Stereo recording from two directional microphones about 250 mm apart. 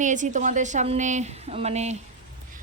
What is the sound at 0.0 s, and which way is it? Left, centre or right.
A woman's voice, right.